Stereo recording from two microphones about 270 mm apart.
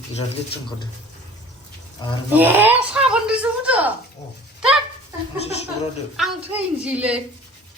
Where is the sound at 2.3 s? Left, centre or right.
Centre.